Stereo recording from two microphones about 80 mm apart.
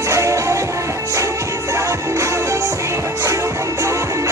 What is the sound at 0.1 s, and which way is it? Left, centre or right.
Music, right.